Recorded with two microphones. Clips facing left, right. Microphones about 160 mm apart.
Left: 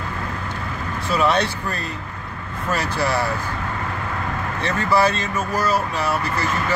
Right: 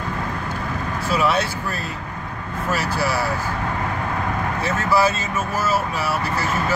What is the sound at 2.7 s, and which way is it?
Speech, 5° right (ahead or behind).